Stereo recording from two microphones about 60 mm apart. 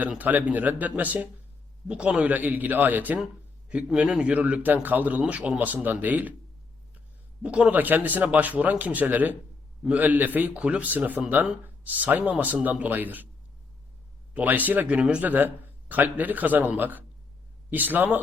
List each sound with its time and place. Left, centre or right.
0.2 s a man's voice: right
3.8 s a man's voice: centre; by 6.3 s right
7.4 s a man's voice: right
14.3 s a man's voice: right
14.9 s speech: centre
15.2 s a man's voice: right